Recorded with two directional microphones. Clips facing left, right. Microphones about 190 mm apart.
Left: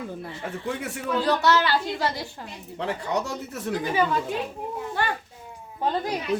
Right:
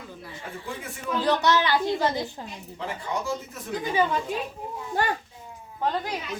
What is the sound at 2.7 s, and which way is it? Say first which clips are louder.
Speech: left 4 dB; 70° left (ahead or behind).